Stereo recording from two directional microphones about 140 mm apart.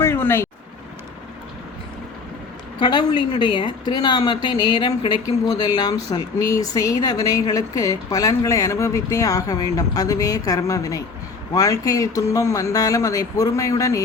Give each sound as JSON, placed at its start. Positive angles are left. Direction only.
{"t": 0.0, "sound": "vehicle", "side_deg": 15}
{"t": 2.8, "sound": "a woman's voice", "side_deg": 35}